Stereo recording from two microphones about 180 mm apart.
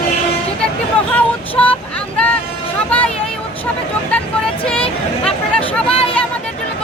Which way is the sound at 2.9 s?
5° left (ahead or behind).